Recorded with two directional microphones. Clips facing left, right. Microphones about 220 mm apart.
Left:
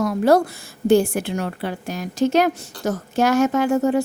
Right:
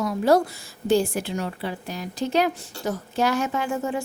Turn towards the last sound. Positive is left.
turn(degrees=40)  # may be behind; listen again after turning